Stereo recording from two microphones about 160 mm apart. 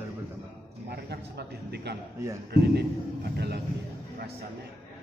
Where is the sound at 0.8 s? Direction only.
85° right.